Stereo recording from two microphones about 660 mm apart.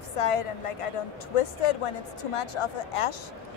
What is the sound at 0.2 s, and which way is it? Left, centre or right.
Speech, left.